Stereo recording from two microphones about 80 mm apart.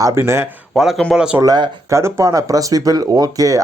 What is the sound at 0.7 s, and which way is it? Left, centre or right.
Speech, centre.